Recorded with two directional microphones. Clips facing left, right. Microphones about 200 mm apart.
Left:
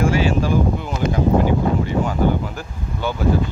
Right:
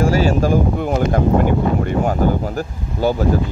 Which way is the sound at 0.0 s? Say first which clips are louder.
Right 3 dB; 40° right (ahead or behind).